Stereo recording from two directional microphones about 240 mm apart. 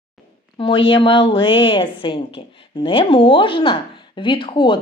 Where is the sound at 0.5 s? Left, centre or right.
Left.